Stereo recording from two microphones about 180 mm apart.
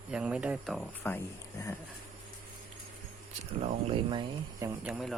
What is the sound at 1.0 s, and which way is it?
Speech, 10° left (ahead or behind).